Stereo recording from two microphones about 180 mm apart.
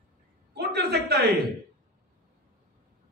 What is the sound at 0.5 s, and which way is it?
Speech, 60° right (ahead or behind).